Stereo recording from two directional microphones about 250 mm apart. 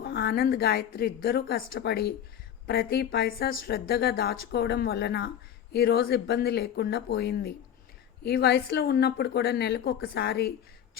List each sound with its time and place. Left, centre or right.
0.0 s a woman's voice: left